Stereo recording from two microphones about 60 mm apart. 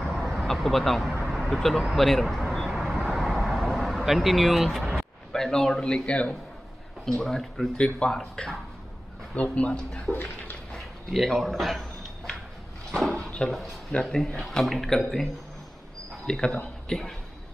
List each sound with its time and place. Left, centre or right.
0.0 s vehicle: centre
7.1 s speech: centre
7.7 s speech: centre
8.2 s speech: centre
9.3 s speech: left
10.1 s dog: left
10.7 s a sound: centre
13.1 s drawer open or close: centre
14.0 s speech: centre
16.3 s a man's voice: centre